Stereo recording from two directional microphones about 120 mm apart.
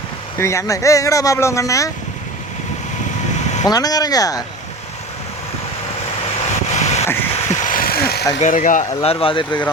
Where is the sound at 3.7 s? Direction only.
30° left (ahead or behind).